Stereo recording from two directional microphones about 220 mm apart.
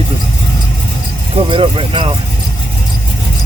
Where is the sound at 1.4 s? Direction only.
25° right (ahead or behind).